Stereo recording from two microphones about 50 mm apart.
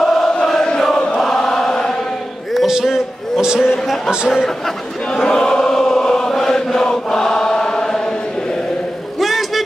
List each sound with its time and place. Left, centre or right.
0.0 s chant: centre
2.5 s a sound: centre
3.7 s music: centre
5.1 s chant: centre
9.2 s vehicle: centre